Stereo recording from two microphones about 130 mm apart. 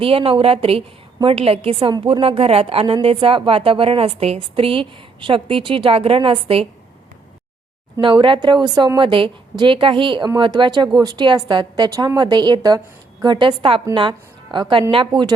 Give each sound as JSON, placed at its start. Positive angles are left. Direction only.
{"t": 0.0, "sound": "a woman's voice", "side_deg": -45}
{"t": 1.9, "sound": "a woman's voice", "side_deg": -35}
{"t": 2.2, "sound": "a woman's voice", "side_deg": -45}
{"t": 8.0, "sound": "a woman's voice", "side_deg": -40}